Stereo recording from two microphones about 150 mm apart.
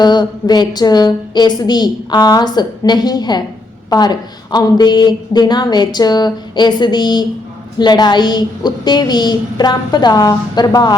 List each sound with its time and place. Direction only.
0.0 s a woman's voice: 25° left (ahead or behind)